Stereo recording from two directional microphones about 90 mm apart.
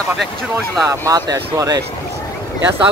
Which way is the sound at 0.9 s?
40° right (ahead or behind).